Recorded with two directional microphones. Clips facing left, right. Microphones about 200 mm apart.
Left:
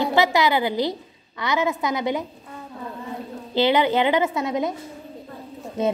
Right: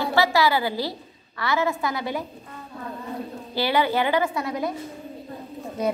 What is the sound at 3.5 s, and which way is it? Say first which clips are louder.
A woman's voice: left 4 dB; 20° left (ahead or behind).